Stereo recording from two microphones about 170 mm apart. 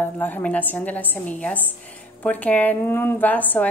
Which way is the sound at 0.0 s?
10° left (ahead or behind).